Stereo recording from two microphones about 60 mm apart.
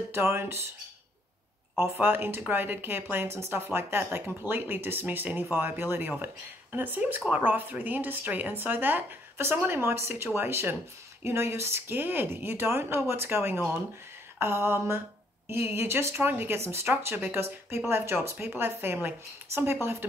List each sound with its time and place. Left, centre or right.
0.1 s speech: right
1.8 s speech: right
16.9 s speech: right